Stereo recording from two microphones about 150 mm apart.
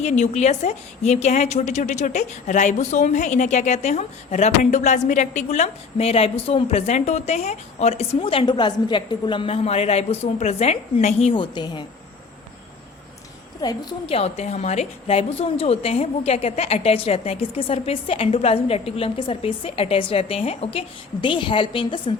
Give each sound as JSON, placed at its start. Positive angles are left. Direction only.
{"t": 0.0, "sound": "a woman's voice", "side_deg": 50}
{"t": 11.5, "sound": "a woman's voice", "side_deg": 30}
{"t": 13.6, "sound": "a woman's voice", "side_deg": 25}
{"t": 14.1, "sound": "a woman's voice", "side_deg": 45}